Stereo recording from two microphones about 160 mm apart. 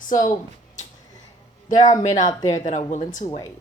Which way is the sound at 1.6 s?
55° left (ahead or behind).